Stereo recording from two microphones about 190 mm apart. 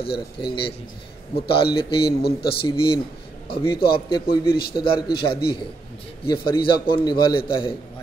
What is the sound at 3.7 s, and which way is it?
Speech, 55° left (ahead or behind).